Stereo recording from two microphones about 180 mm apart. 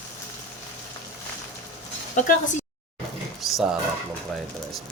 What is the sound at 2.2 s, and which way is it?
Speech, 45° left (ahead or behind).